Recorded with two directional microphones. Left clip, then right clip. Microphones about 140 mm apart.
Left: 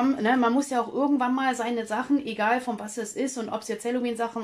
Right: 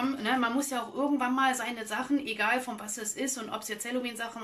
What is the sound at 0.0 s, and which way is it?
Speech, 45° left (ahead or behind).